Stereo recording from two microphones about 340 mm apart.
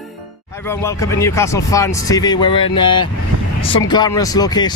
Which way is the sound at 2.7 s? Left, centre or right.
Left.